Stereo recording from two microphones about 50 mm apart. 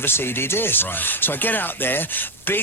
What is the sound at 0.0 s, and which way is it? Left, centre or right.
Speech, left.